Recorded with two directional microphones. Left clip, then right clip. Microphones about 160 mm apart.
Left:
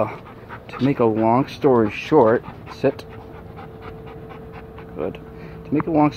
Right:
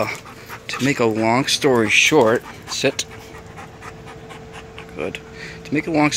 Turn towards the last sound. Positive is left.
turn(degrees=0)  # may be behind; listen again after turning